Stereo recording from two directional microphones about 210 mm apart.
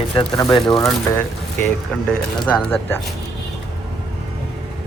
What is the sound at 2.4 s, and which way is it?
Speech, 5° left (ahead or behind).